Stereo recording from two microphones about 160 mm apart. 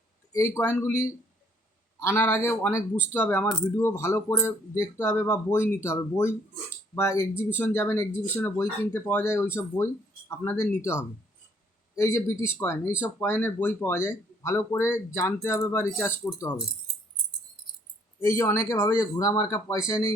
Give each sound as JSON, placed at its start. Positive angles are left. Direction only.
{"t": 0.3, "sound": "speech", "side_deg": 15}
{"t": 18.2, "sound": "speech", "side_deg": 15}